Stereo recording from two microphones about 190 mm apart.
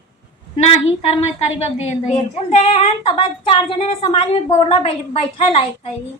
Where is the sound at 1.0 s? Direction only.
35° left (ahead or behind).